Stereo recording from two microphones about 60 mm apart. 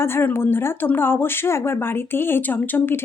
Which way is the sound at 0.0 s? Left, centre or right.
Left.